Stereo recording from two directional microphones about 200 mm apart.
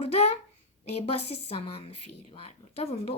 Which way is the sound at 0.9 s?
30° left (ahead or behind).